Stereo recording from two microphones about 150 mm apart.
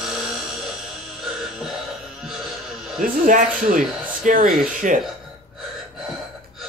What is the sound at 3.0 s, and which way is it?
Speech, 65° right (ahead or behind).